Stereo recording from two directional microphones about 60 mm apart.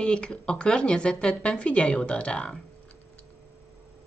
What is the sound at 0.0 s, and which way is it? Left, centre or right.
Speech, centre.